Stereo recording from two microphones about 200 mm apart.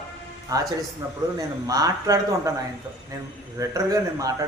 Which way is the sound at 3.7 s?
15° right (ahead or behind).